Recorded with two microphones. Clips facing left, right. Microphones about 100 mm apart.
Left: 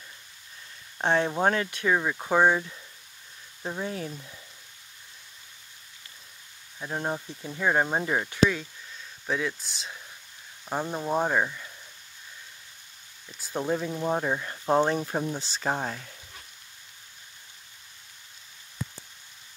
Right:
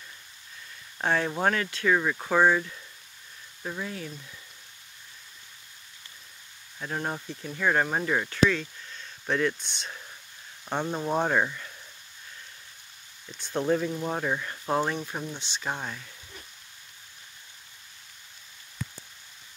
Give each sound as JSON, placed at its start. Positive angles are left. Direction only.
{"t": 0.9, "sound": "speech", "side_deg": 20}
{"t": 3.6, "sound": "speech", "side_deg": 30}
{"t": 6.8, "sound": "speech", "side_deg": 15}
{"t": 9.2, "sound": "speech", "side_deg": 5}
{"t": 13.4, "sound": "speech", "side_deg": 10}
{"t": 15.0, "sound": "speech", "side_deg": 40}